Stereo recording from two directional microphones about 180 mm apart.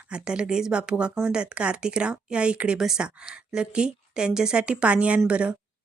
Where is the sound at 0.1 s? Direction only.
5° right (ahead or behind).